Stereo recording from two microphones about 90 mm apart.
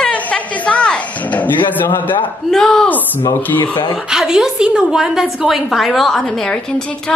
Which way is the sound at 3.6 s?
65° left (ahead or behind).